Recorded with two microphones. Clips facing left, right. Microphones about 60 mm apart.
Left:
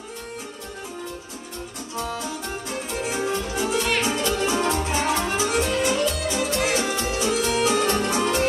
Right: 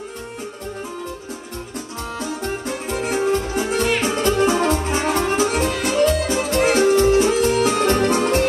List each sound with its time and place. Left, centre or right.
2.1 s music: right